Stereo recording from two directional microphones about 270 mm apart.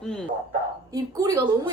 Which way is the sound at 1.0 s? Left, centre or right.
Centre.